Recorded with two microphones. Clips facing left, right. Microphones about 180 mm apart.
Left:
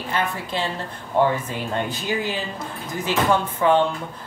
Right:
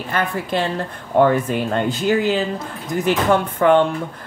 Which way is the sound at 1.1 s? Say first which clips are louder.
Right 5 dB; 55° right (ahead or behind).